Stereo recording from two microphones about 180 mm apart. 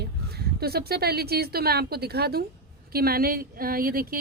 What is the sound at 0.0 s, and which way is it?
Speech, 60° right (ahead or behind).